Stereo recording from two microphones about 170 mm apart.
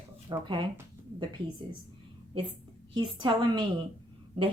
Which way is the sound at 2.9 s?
25° right (ahead or behind).